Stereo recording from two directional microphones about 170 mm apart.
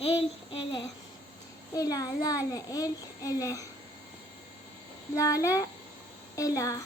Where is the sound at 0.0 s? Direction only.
35° left (ahead or behind).